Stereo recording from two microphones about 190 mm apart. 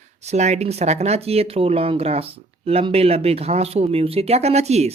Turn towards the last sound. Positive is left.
turn(degrees=-35)  # may be behind; listen again after turning